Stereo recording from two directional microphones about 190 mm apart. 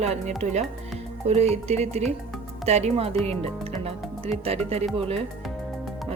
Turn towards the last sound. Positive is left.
turn(degrees=-30)  # may be behind; listen again after turning